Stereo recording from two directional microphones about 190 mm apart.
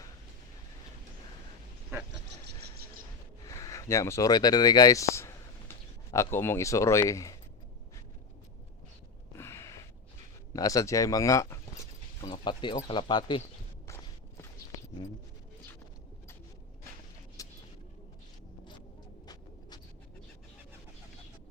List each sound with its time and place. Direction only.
2.3 s vehicle: 55° right (ahead or behind)
3.5 s speech: 15° left (ahead or behind)
9.3 s gasp: 15° left (ahead or behind)
10.5 s speech: 20° left (ahead or behind)
13.8 s walk: 15° left (ahead or behind)
17.4 s a sound: 15° left (ahead or behind)